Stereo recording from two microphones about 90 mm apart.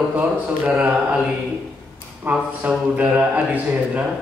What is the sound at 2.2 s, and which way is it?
A man's voice, 15° right (ahead or behind).